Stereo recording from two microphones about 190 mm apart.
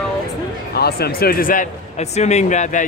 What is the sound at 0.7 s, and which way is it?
Speech, 55° left (ahead or behind).